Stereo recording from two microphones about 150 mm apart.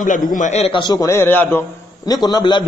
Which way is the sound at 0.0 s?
60° left (ahead or behind).